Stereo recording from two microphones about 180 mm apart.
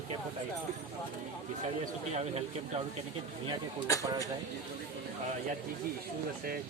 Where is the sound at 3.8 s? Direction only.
20° left (ahead or behind).